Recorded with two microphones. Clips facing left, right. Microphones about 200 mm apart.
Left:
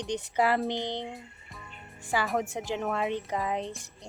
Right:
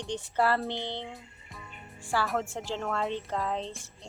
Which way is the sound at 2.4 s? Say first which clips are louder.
Left 2 dB; 15° left (ahead or behind).